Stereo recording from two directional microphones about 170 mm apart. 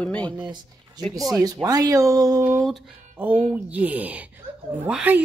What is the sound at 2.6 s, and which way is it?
Speech, centre (ahead or behind).